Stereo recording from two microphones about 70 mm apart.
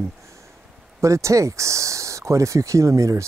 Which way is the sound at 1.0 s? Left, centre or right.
Right.